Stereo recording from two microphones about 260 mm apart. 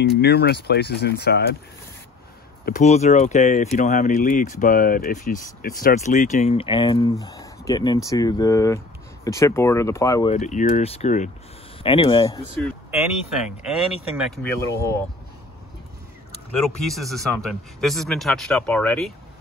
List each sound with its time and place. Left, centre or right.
0.2 s speech: left
2.6 s speech: left; by 10.3 s centre
10.3 s speech: left
13.7 s speech: centre
14.4 s speech: centre
16.8 s speech: centre